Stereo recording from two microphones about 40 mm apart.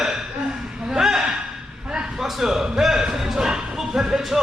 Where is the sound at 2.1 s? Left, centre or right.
Centre.